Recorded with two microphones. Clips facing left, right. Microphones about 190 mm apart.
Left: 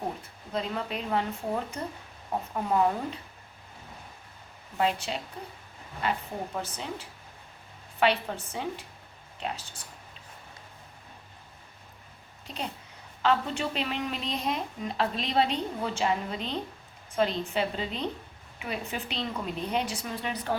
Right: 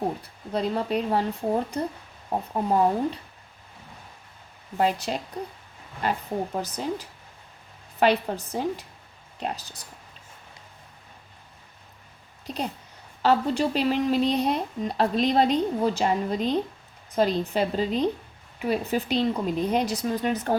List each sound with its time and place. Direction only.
0.2 s speech: 35° right (ahead or behind)
4.8 s speech: 40° right (ahead or behind)
13.2 s speech: 40° right (ahead or behind)